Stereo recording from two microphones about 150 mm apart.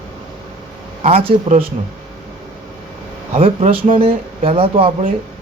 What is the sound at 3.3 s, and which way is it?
Speech, 40° right (ahead or behind).